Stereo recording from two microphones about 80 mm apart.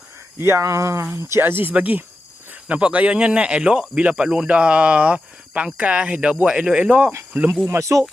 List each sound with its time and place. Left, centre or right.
0.3 s speech: right
7.8 s speech: right